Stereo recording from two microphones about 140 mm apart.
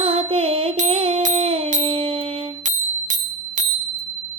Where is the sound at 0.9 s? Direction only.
45° right (ahead or behind).